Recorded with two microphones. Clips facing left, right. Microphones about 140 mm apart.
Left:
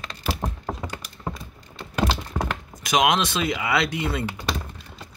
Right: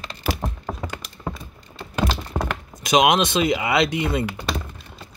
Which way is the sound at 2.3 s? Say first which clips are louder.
Right 3 dB; 40° right (ahead or behind).